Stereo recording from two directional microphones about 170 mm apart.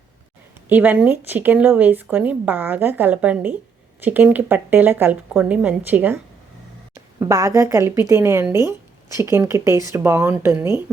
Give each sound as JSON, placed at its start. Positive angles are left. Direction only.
{"t": 0.7, "sound": "speech", "side_deg": -10}
{"t": 7.2, "sound": "speech", "side_deg": -20}